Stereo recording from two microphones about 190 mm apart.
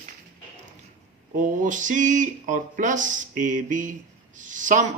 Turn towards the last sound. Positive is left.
turn(degrees=-40)  # may be behind; listen again after turning